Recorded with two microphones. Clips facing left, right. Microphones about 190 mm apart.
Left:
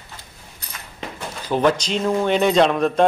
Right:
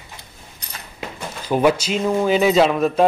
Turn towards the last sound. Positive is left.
turn(degrees=-5)  # may be behind; listen again after turning